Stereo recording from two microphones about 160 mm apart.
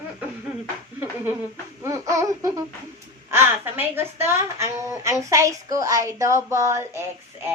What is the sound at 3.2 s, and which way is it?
A woman's voice, 15° right (ahead or behind).